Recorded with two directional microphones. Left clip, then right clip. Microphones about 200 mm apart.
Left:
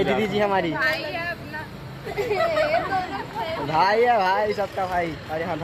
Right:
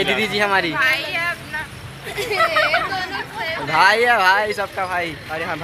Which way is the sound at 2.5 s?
30° right (ahead or behind).